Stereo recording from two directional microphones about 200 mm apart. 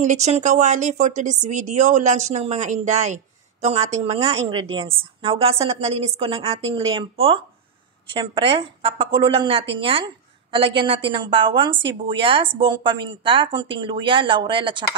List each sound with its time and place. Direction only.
0.0 s a woman's voice: 35° right (ahead or behind)